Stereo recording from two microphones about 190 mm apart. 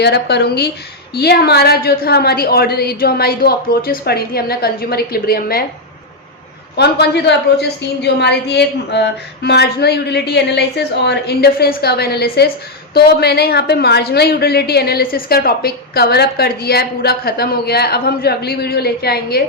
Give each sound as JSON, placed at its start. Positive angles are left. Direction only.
{"t": 0.0, "sound": "a woman's voice", "side_deg": 60}
{"t": 6.7, "sound": "a woman's voice", "side_deg": 60}